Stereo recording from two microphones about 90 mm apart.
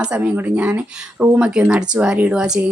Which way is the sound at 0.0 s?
15° right (ahead or behind).